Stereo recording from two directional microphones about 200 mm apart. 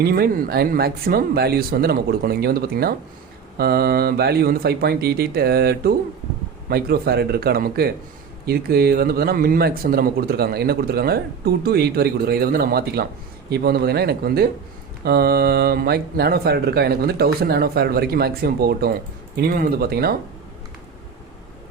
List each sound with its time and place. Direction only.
0.0 s speech: 50° right (ahead or behind)